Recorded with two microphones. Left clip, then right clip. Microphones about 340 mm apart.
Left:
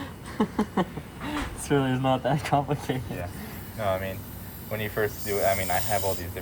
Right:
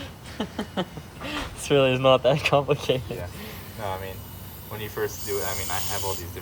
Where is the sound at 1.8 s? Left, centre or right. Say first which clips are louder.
Right 8 dB; centre.